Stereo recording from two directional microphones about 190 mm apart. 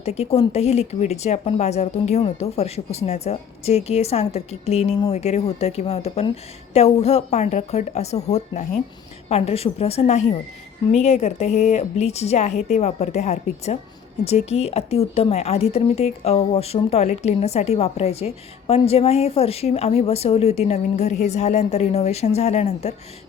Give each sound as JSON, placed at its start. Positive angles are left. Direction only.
{"t": 0.0, "sound": "speech", "side_deg": 35}